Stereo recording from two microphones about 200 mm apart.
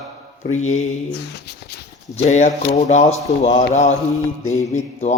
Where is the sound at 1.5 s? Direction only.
55° left (ahead or behind).